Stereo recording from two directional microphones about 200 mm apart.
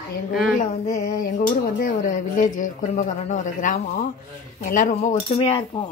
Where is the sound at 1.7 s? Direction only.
40° left (ahead or behind).